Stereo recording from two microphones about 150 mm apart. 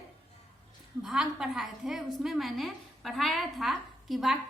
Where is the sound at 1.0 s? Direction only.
5° right (ahead or behind).